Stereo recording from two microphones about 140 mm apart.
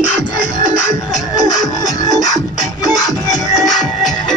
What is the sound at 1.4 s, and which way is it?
Music, 25° left (ahead or behind).